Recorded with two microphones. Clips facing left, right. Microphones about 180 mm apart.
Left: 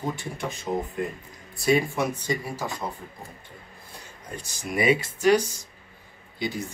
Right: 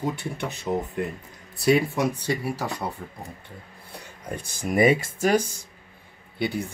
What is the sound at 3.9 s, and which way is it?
Speech, 60° right (ahead or behind).